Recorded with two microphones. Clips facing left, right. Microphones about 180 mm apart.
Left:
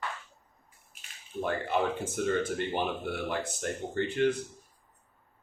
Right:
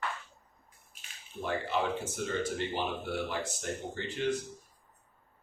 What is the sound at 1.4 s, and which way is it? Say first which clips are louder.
Speech: left 3 dB; 55° left (ahead or behind).